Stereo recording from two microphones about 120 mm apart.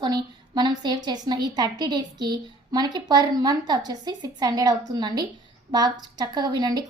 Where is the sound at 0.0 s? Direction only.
40° right (ahead or behind).